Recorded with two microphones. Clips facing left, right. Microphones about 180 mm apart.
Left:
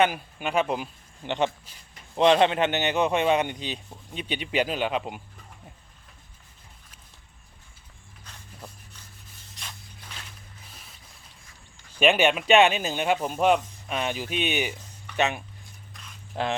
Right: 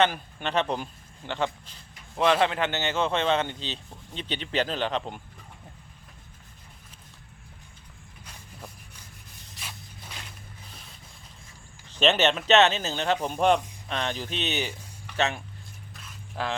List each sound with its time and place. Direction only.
0.0 s a man's voice: 10° left (ahead or behind)
2.1 s a man's voice: 20° left (ahead or behind)
8.2 s rub: 10° right (ahead or behind)
9.6 s a sound: 10° right (ahead or behind)
11.9 s a man's voice: 10° left (ahead or behind)